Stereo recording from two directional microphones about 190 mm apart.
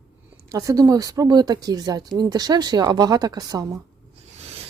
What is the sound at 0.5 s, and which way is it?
Speech, 20° right (ahead or behind).